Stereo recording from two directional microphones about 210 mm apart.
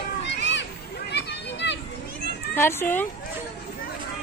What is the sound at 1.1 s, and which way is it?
Children playing, 55° left (ahead or behind).